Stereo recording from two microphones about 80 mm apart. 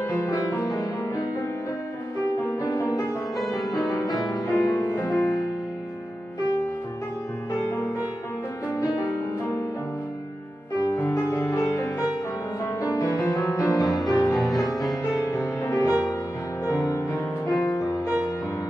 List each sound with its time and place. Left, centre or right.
0.3 s music: left
3.3 s music: centre
4.5 s music: left
5.2 s music: left
8.8 s music: left
10.8 s music: left
13.7 s music: centre
15.0 s music: left
16.6 s music: left